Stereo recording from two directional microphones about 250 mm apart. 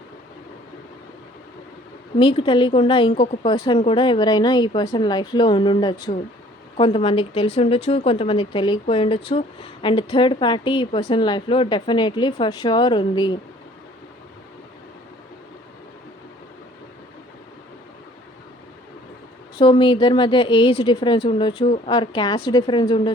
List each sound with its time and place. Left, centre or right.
2.1 s a woman's voice: centre
19.5 s a woman's voice: centre